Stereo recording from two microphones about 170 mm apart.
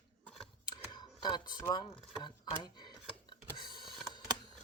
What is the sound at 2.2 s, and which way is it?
Speech, 25° left (ahead or behind).